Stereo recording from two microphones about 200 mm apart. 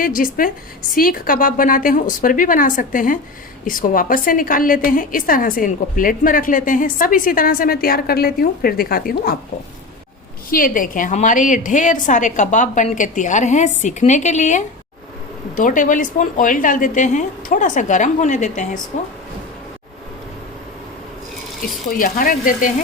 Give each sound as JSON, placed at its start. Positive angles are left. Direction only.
{"t": 0.0, "sound": "a woman's voice", "side_deg": 45}
{"t": 10.5, "sound": "a woman's voice", "side_deg": 45}
{"t": 21.8, "sound": "a woman's voice", "side_deg": 45}